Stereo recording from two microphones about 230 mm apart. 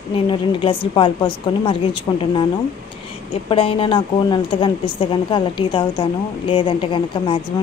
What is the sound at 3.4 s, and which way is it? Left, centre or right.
Speech, left.